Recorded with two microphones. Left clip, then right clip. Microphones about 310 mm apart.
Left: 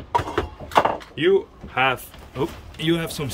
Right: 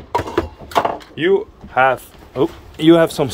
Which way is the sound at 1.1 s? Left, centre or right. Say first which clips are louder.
Right 4 dB; centre.